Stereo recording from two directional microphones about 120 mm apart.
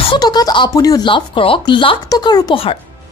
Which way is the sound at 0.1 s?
35° left (ahead or behind).